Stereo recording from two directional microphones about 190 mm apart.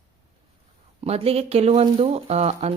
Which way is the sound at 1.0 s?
30° right (ahead or behind).